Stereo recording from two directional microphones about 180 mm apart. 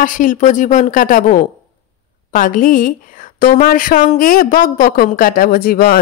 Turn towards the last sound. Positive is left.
turn(degrees=55)  # may be behind; listen again after turning